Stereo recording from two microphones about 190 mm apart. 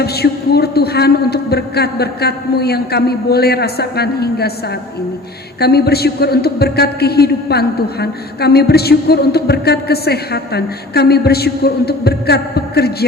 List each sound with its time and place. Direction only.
0.0 s speech: 55° left (ahead or behind)
5.5 s speech: 55° left (ahead or behind)